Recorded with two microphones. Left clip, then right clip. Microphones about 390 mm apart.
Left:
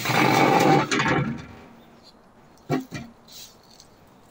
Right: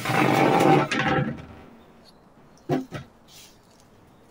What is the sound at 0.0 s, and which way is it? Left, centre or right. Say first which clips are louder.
Roar: left 1 dB; centre.